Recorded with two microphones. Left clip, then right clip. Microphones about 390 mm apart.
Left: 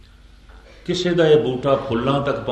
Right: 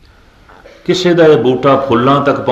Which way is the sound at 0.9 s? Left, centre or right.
Centre.